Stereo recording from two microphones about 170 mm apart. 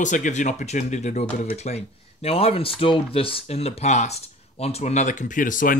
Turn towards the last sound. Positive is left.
turn(degrees=50)  # may be behind; listen again after turning